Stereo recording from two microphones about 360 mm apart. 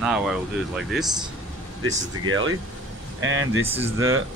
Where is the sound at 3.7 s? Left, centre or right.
Centre.